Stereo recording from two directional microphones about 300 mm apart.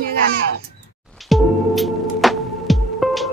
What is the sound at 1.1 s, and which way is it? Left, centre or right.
Music, centre.